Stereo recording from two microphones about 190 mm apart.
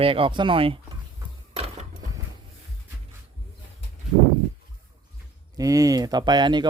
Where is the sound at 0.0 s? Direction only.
30° right (ahead or behind).